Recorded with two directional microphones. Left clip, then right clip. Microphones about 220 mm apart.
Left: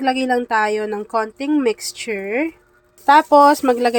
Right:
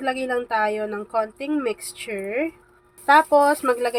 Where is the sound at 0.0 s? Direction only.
25° left (ahead or behind).